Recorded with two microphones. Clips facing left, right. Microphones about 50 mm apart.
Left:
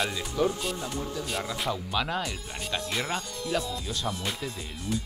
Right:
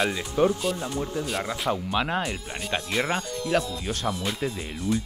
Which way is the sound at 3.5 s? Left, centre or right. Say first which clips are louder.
Right 4 dB; right.